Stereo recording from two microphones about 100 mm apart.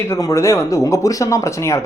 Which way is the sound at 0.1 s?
30° left (ahead or behind).